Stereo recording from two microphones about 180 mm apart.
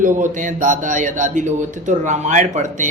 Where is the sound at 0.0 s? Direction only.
45° right (ahead or behind).